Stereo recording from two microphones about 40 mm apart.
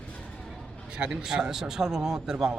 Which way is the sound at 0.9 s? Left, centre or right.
Right.